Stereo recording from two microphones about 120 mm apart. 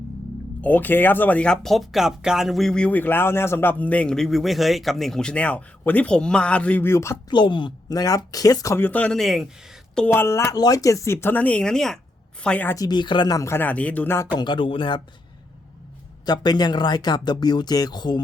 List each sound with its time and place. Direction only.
0.6 s speech: 15° left (ahead or behind)
7.3 s speech: 40° left (ahead or behind); by 9.5 s centre (ahead or behind)
10.1 s speech: 20° left (ahead or behind)
12.7 s speech: 35° left (ahead or behind); by 14.3 s 15° left (ahead or behind)
14.3 s speech: 40° left (ahead or behind)
16.2 s speech: 35° left (ahead or behind)